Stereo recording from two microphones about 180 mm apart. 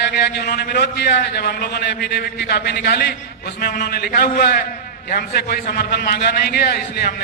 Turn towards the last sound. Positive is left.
turn(degrees=60)  # may be behind; listen again after turning